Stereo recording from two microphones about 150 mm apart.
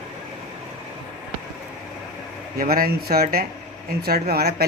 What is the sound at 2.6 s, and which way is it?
Speech, 75° right (ahead or behind).